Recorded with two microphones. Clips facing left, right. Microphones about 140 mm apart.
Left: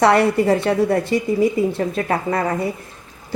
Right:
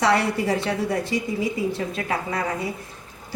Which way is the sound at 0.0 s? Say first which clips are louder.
Left 6 dB; 55° left (ahead or behind).